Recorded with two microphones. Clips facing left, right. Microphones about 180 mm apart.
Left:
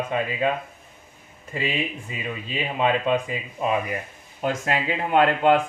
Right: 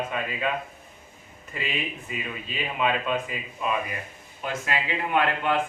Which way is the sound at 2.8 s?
30° left (ahead or behind).